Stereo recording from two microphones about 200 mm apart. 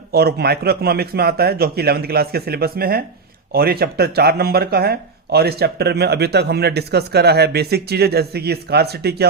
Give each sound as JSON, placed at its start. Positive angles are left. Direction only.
{"t": 0.1, "sound": "speech", "side_deg": -50}